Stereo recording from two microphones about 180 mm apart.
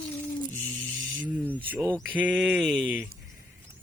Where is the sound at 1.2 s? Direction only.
10° right (ahead or behind).